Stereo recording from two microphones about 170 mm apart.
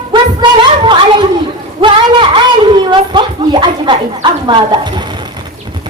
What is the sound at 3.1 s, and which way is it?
A woman's voice, 25° right (ahead or behind).